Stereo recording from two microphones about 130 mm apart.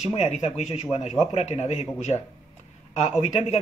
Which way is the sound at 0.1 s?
55° left (ahead or behind).